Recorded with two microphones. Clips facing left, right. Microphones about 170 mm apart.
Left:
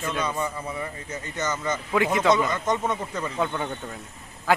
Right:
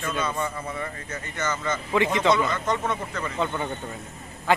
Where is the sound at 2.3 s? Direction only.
15° left (ahead or behind).